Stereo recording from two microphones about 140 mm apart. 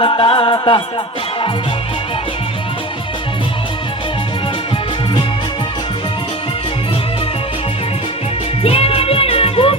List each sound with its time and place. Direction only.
0.0 s music: 35° left (ahead or behind)
8.6 s music: 45° left (ahead or behind)